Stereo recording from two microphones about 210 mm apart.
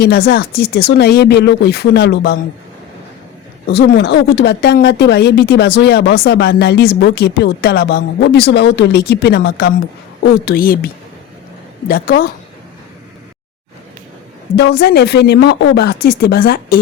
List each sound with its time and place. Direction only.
0.0 s speech: 50° left (ahead or behind)
3.7 s speech: 50° left (ahead or behind)
11.9 s speech: 45° left (ahead or behind)
14.5 s speech: 55° left (ahead or behind)